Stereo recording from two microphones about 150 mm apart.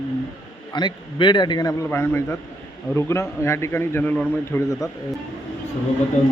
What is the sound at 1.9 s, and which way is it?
A man's voice, 15° left (ahead or behind).